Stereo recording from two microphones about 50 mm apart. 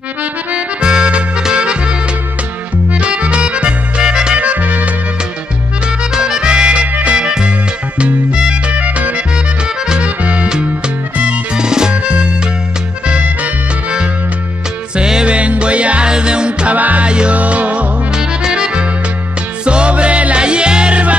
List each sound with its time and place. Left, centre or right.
0.2 s accordion: right
2.9 s music: right
4.4 s music: right
5.9 s music: centre
6.9 s music: right
7.2 s music: centre
8.7 s music: right
11.5 s music: centre
15.0 s music: centre
18.1 s music: centre